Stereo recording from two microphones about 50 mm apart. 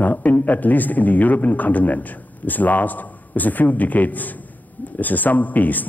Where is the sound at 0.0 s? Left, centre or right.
Left.